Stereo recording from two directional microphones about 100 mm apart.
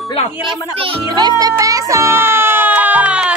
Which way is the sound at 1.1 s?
40° right (ahead or behind).